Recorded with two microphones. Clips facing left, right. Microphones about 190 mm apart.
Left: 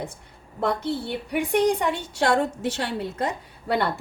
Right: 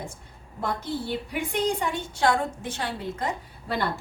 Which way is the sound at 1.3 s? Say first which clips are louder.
Left 7 dB; 65° left (ahead or behind).